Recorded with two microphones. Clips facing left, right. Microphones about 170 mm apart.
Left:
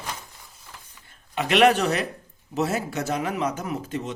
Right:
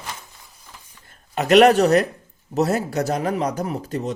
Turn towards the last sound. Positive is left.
turn(degrees=-40)  # may be behind; listen again after turning